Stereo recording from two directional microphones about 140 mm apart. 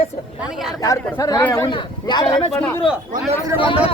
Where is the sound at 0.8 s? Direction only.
25° left (ahead or behind).